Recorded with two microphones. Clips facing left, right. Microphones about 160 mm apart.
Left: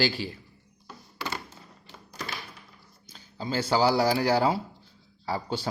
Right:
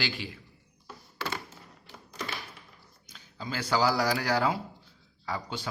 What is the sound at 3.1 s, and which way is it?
A man's voice, 30° left (ahead or behind).